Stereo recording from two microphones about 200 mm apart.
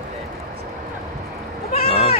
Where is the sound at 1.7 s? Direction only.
30° left (ahead or behind).